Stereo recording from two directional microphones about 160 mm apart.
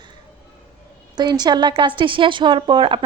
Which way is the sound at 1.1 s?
25° right (ahead or behind).